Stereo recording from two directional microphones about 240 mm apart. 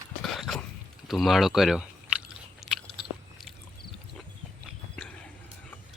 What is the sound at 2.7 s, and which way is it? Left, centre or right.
Biting, centre.